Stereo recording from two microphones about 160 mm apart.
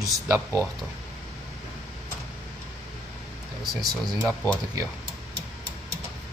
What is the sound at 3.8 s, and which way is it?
Speech, 25° right (ahead or behind).